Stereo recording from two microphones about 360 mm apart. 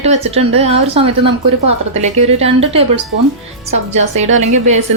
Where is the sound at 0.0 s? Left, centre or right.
Centre.